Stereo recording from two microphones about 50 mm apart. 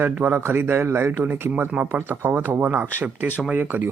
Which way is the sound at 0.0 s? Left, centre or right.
Right.